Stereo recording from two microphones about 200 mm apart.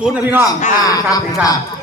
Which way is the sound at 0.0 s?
10° right (ahead or behind).